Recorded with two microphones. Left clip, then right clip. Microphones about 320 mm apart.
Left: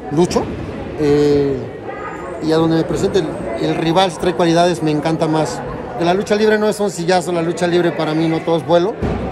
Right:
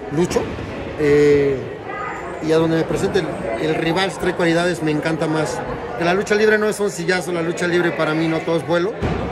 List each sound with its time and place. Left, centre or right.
0.1 s a man's voice: centre
2.5 s a man's voice: centre